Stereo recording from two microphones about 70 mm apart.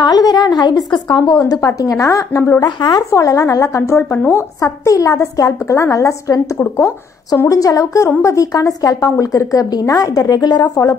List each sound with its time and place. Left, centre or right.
0.0 s a woman's voice: left
2.3 s speech: left
2.6 s a woman's voice: left
3.1 s a woman's voice: left
3.9 s speech: left
4.6 s a woman's voice: left
10.4 s a woman's voice: left